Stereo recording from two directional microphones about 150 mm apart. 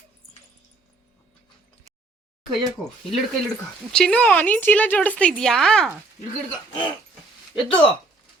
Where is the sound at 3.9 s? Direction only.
5° left (ahead or behind).